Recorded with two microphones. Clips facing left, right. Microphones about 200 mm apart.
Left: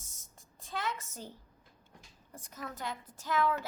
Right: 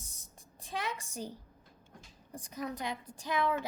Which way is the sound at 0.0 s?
15° right (ahead or behind).